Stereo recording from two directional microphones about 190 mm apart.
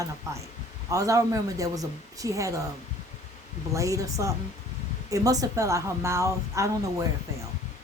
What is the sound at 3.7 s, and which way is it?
A woman's voice, 15° right (ahead or behind).